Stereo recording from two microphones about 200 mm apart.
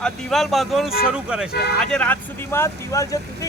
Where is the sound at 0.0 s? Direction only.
Centre (ahead or behind).